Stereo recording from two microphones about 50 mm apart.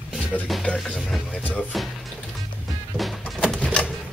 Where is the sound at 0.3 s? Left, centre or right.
Left.